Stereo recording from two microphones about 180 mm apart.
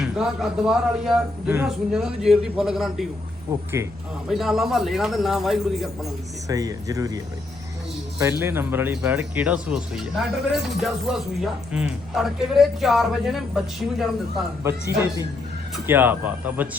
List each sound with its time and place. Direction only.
0.0 s speech: centre (ahead or behind)
3.5 s speech: 15° right (ahead or behind)
4.3 s speech: centre (ahead or behind)
6.5 s speech: 20° right (ahead or behind)
8.2 s speech: 15° right (ahead or behind)
14.6 s speech: 15° right (ahead or behind)